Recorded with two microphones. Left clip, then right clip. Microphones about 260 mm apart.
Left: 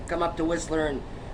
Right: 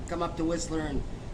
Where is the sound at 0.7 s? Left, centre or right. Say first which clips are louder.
Left 7 dB; right.